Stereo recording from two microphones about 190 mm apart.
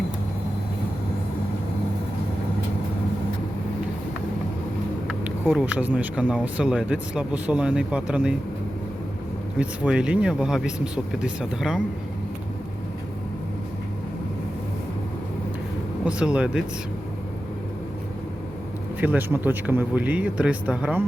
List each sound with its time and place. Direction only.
5.0 s speech: 5° right (ahead or behind)
9.6 s speech: 5° right (ahead or behind)
16.0 s speech: 5° right (ahead or behind)
18.9 s speech: 10° right (ahead or behind)